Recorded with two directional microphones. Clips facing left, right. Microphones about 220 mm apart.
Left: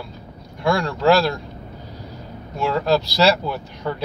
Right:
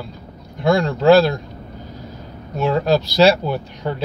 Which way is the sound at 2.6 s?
15° right (ahead or behind).